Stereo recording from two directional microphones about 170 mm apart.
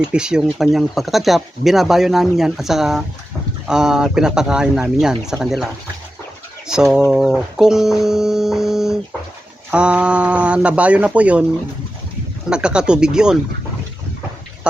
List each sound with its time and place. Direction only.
0.1 s speech: 5° right (ahead or behind)
6.7 s speech: 5° right (ahead or behind)
12.5 s speech: 5° right (ahead or behind)